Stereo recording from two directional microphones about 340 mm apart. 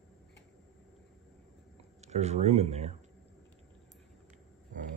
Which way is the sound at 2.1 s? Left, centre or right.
Centre.